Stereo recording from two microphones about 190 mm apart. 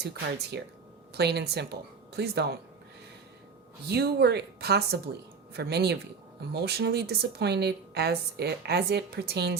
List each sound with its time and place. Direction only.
0.5 s a woman's voice: 60° right (ahead or behind)
3.8 s a woman's voice: 60° right (ahead or behind)